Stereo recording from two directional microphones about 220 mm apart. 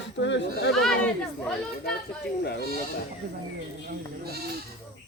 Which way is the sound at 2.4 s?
50° left (ahead or behind).